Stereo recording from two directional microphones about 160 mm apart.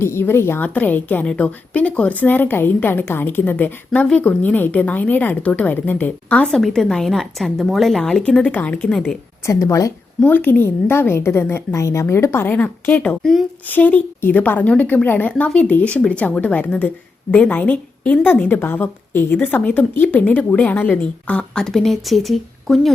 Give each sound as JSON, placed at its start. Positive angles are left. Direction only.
{"t": 0.0, "sound": "a woman's voice", "side_deg": 15}
{"t": 9.5, "sound": "a woman's voice", "side_deg": 20}